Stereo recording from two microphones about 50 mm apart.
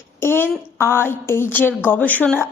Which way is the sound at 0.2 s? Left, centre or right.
Left.